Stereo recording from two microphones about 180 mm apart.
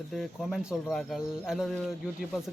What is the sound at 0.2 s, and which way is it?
A man's voice, centre (ahead or behind).